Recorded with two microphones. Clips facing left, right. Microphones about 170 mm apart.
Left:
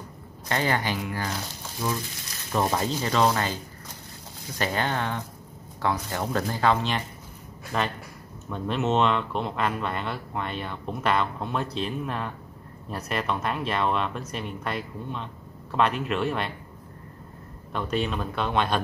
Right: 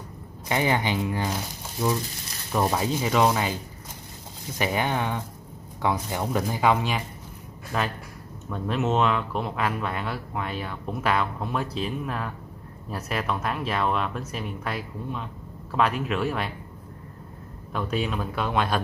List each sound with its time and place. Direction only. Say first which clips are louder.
0.5 s speech: right 2 dB; 15° right (ahead or behind)
4.6 s speech: right 1 dB; 15° right (ahead or behind)
17.7 s speech: even; 5° right (ahead or behind)